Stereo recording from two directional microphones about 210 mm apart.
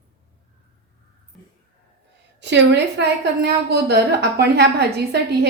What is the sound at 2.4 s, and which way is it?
A woman's voice, 55° right (ahead or behind).